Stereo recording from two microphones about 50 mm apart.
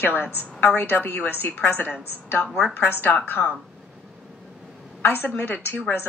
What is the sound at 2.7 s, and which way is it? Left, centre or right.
Speech, left.